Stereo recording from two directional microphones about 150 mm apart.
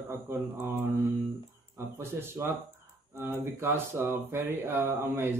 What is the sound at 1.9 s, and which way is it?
Speech, 15° right (ahead or behind).